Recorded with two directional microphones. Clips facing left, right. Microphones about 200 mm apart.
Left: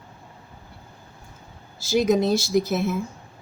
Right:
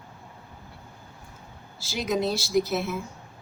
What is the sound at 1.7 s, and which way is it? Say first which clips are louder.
Speech: left 8 dB; 45° left (ahead or behind).